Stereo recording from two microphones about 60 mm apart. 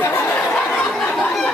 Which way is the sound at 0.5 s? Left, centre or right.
Centre.